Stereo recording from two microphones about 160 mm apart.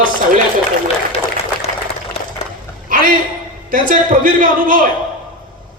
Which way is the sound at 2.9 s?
60° right (ahead or behind).